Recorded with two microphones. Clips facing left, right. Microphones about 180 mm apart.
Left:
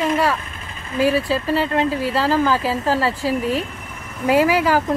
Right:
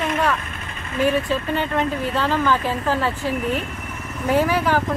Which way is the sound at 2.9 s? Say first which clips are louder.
Left 3 dB; 10° left (ahead or behind).